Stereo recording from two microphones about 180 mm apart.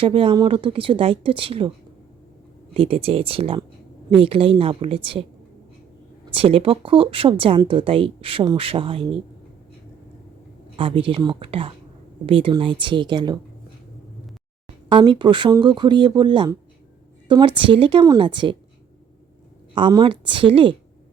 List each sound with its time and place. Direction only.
0.0 s speech: 30° right (ahead or behind)
2.7 s speech: 30° right (ahead or behind)
6.3 s speech: 30° right (ahead or behind)
10.8 s speech: 30° right (ahead or behind)
14.8 s speech: 25° right (ahead or behind)
19.7 s speech: 25° right (ahead or behind)